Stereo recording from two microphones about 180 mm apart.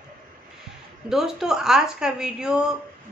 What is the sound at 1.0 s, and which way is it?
A woman's voice, 5° right (ahead or behind).